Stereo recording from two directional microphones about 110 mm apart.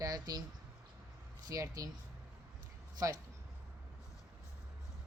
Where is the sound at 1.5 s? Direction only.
35° right (ahead or behind).